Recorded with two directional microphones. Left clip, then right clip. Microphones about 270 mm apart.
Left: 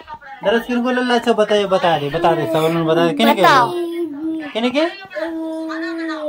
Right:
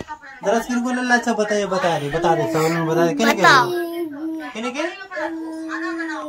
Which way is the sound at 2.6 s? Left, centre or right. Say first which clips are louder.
Left 3 dB; centre.